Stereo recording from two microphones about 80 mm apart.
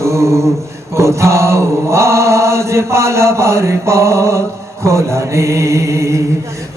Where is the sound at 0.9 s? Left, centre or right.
Right.